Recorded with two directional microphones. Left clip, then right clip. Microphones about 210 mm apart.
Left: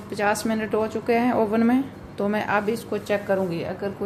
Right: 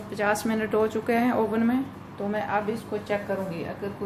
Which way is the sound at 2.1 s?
50° left (ahead or behind).